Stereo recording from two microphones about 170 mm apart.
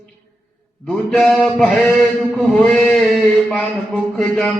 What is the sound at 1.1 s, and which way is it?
Mantra, centre (ahead or behind).